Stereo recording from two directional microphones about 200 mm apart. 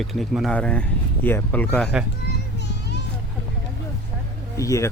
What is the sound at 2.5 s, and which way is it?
Music, 55° left (ahead or behind).